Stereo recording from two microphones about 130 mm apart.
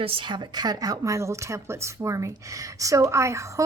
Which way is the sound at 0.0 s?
45° right (ahead or behind).